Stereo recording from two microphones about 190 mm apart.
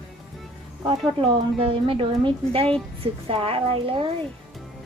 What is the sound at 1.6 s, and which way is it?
Speech, 30° right (ahead or behind).